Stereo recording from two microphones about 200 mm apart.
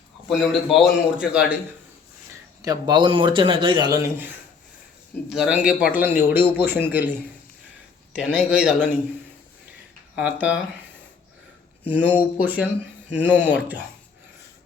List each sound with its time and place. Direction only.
0.3 s a man's voice: centre (ahead or behind)
2.6 s a man's voice: 20° right (ahead or behind)
10.2 s a man's voice: 5° right (ahead or behind)
11.9 s a man's voice: 10° right (ahead or behind)